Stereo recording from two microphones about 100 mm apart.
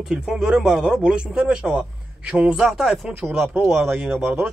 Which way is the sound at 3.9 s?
20° right (ahead or behind).